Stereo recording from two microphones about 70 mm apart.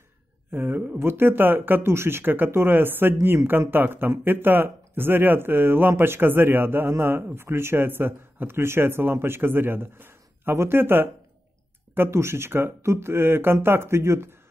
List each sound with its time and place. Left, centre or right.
0.5 s speech: right